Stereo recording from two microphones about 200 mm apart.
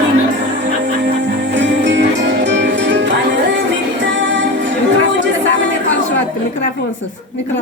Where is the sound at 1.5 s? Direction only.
65° right (ahead or behind).